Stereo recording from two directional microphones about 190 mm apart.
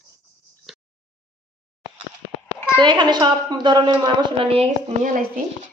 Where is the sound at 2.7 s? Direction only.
25° right (ahead or behind); by 5.4 s 45° right (ahead or behind).